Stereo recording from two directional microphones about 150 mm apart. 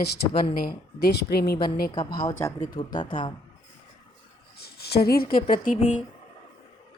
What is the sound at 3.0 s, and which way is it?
Speech, 35° left (ahead or behind).